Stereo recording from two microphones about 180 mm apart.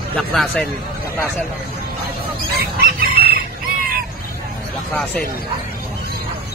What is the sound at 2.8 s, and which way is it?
Chicken, 60° right (ahead or behind).